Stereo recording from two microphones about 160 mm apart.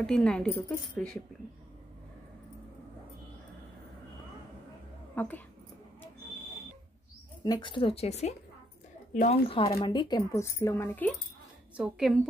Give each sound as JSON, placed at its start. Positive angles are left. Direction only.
{"t": 0.0, "sound": "a woman's voice", "side_deg": 5}
{"t": 5.1, "sound": "speech", "side_deg": 10}
{"t": 7.4, "sound": "a woman's voice", "side_deg": 30}
{"t": 9.5, "sound": "a woman's voice", "side_deg": 35}
{"t": 11.7, "sound": "a woman's voice", "side_deg": -5}